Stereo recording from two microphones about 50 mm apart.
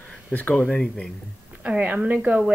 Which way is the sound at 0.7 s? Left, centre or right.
Left.